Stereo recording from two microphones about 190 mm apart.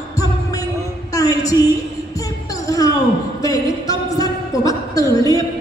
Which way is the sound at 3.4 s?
20° left (ahead or behind).